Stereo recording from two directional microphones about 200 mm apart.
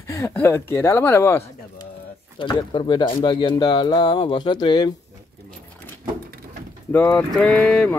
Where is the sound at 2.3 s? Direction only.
20° left (ahead or behind).